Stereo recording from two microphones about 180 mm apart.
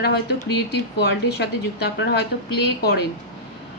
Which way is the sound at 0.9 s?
65° left (ahead or behind).